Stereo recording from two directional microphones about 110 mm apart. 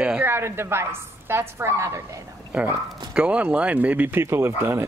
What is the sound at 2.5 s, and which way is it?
Speech, 10° right (ahead or behind).